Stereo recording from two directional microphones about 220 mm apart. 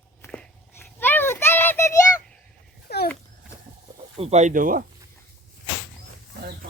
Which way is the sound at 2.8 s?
45° left (ahead or behind).